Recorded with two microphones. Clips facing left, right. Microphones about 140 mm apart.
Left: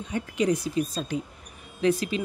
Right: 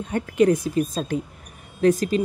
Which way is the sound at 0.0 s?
55° right (ahead or behind).